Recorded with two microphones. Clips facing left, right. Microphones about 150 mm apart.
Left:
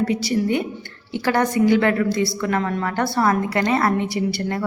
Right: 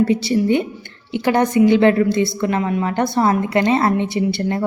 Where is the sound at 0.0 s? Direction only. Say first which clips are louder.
Right 4 dB; 25° right (ahead or behind).